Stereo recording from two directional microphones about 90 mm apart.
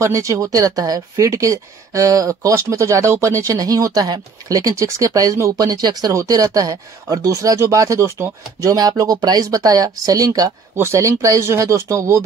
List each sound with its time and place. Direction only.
0.0 s speech: 35° right (ahead or behind)
10.8 s speech: 30° right (ahead or behind)